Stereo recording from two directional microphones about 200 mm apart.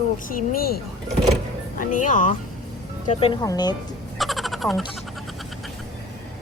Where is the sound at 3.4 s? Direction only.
20° left (ahead or behind).